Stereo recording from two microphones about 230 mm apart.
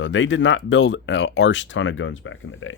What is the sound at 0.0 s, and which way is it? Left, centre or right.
Speech, left.